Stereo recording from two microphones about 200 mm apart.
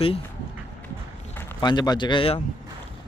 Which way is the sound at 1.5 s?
20° left (ahead or behind).